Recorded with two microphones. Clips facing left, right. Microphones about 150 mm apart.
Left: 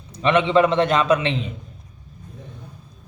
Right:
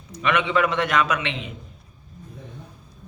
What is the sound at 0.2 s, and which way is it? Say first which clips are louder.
A man's voice: left 5 dB; 30° left (ahead or behind).